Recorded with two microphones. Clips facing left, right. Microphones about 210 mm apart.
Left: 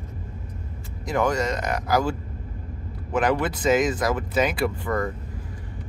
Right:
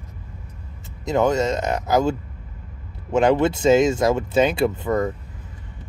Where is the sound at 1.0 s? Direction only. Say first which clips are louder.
Right 4 dB; 25° right (ahead or behind).